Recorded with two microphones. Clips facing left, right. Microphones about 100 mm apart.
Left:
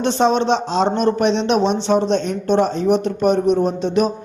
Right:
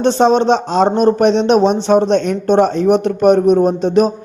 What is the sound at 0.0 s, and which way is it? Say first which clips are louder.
A man's voice: right 5 dB; 35° right (ahead or behind).